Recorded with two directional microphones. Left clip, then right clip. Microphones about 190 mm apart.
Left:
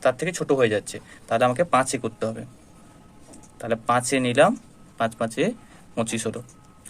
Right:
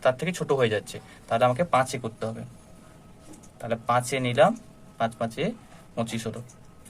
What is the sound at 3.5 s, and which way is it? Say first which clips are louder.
Speech: left 3 dB; 35° left (ahead or behind).